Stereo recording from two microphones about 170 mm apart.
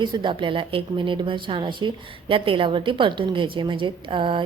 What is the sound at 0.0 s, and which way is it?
A woman's voice, 25° right (ahead or behind).